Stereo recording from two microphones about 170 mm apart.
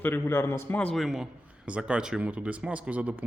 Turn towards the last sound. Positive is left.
turn(degrees=-5)  # may be behind; listen again after turning